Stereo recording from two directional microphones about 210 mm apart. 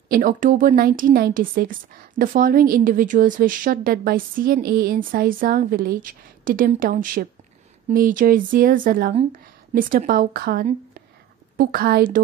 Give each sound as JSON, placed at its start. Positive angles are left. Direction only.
{"t": 0.1, "sound": "a woman's voice", "side_deg": -40}